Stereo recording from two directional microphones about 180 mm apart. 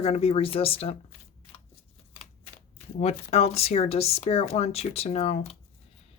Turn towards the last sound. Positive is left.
turn(degrees=35)  # may be behind; listen again after turning